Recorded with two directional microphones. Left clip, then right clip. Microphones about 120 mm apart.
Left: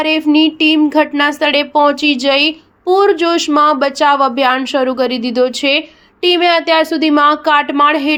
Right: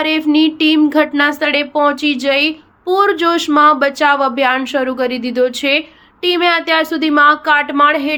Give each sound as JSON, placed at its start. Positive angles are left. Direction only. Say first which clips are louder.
{"t": 0.0, "sound": "a sound", "louder": "left 2 dB", "side_deg": 10}
{"t": 1.5, "sound": "speech", "louder": "left 2 dB", "side_deg": 30}
{"t": 2.8, "sound": "speech", "louder": "left 2 dB", "side_deg": 20}